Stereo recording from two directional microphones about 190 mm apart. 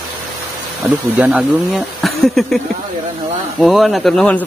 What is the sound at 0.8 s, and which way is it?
Speech, 10° right (ahead or behind).